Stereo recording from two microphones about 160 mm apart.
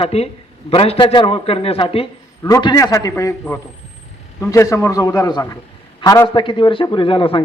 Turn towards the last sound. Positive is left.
turn(degrees=35)  # may be behind; listen again after turning